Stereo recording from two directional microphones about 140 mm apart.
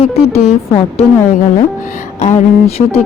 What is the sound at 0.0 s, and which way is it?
Speech, 45° left (ahead or behind).